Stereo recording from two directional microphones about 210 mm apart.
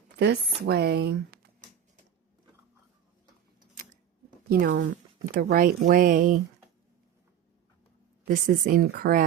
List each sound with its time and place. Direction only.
0.2 s speech: 50° right (ahead or behind)
4.4 s speech: 40° right (ahead or behind)
8.2 s speech: 40° right (ahead or behind)